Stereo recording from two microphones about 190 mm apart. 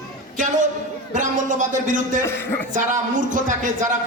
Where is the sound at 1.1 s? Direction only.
40° right (ahead or behind).